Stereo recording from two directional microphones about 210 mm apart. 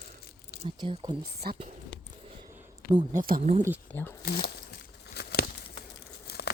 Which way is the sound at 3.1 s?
45° right (ahead or behind).